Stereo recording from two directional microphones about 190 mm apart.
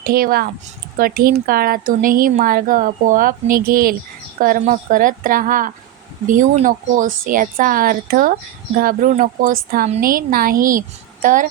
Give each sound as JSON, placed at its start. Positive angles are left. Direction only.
{"t": 0.0, "sound": "a woman's voice", "side_deg": -50}